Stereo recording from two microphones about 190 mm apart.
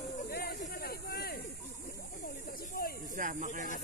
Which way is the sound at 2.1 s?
45° left (ahead or behind).